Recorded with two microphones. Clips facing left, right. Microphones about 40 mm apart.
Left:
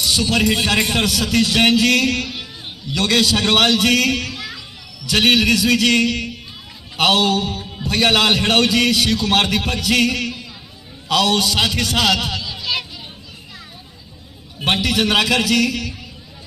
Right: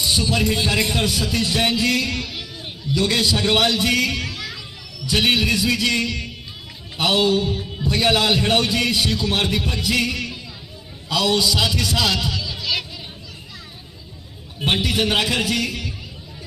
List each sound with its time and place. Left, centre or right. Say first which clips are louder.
0.0 s a man's voice: left 3 dB; left
4.3 s a sound: left 1 dB; left
5.0 s a man's voice: left 4 dB; left
14.6 s a man's voice: left 2 dB; left